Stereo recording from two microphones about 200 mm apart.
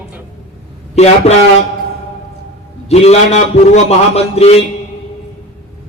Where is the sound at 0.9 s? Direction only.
35° left (ahead or behind).